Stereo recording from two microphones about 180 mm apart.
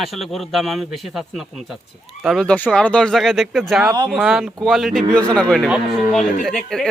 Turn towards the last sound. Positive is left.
turn(degrees=0)  # may be behind; listen again after turning